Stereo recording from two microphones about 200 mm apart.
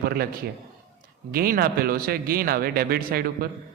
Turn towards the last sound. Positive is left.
turn(degrees=-50)  # may be behind; listen again after turning